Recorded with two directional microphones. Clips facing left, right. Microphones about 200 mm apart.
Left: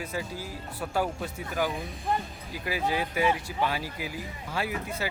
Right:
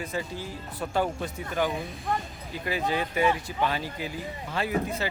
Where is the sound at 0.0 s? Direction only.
10° left (ahead or behind).